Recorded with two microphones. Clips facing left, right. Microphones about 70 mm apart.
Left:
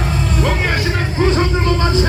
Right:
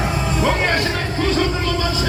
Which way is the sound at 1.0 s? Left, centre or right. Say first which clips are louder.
Left 3 dB; left.